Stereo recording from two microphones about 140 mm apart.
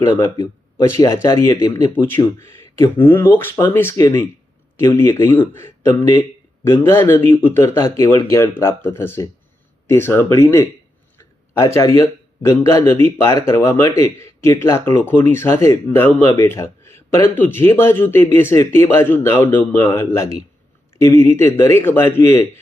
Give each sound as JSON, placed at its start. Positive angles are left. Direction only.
{"t": 0.3, "sound": "speech", "side_deg": 20}
{"t": 11.8, "sound": "speech", "side_deg": 20}